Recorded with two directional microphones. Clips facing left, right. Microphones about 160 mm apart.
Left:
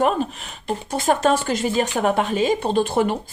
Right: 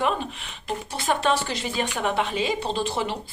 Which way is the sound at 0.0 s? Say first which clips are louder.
Left 6 dB; 40° left (ahead or behind).